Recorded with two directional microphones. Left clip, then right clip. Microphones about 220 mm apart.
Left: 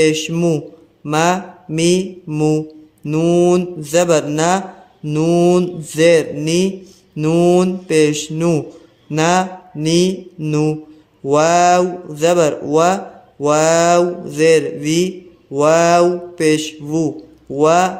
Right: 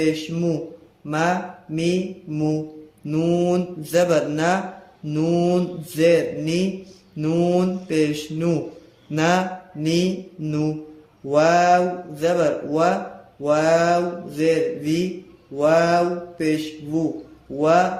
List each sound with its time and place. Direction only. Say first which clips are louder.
0.0 s mantra: left 8 dB; 30° left (ahead or behind)
1.0 s speech: left 6 dB; 25° left (ahead or behind)
9.0 s mantra: left 5 dB; 20° left (ahead or behind)
11.3 s speech: left 4 dB; 25° left (ahead or behind)
15.5 s mantra: left 6 dB; 30° left (ahead or behind)
17.6 s speech: left 5 dB; 25° left (ahead or behind)